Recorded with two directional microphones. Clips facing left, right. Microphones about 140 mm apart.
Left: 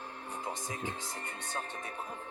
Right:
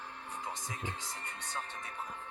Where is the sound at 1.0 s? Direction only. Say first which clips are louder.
Left 3 dB; 50° left (ahead or behind).